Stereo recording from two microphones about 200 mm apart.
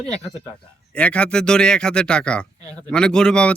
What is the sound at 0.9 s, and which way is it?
Speech, 5° left (ahead or behind).